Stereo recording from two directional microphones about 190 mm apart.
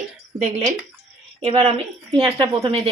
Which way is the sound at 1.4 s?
30° right (ahead or behind).